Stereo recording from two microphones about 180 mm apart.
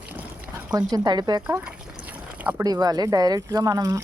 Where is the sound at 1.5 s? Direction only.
10° right (ahead or behind).